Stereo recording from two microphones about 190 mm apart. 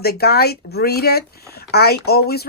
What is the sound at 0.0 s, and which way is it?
Speech, 55° left (ahead or behind).